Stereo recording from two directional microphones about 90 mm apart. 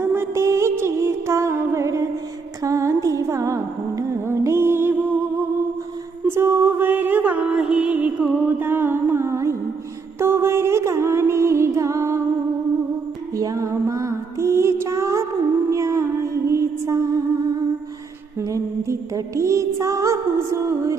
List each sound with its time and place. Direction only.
0.0 s music: 30° right (ahead or behind)
13.3 s music: 40° right (ahead or behind)
18.3 s music: 35° right (ahead or behind)